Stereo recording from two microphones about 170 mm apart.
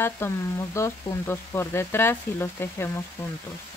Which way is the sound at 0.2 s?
15° left (ahead or behind).